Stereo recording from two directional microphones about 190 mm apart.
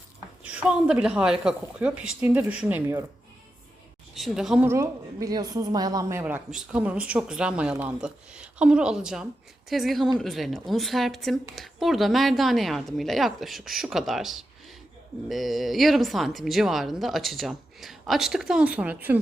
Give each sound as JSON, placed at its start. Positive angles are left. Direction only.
{"t": 0.4, "sound": "a woman's voice", "side_deg": -5}
{"t": 4.1, "sound": "a woman's voice", "side_deg": 0}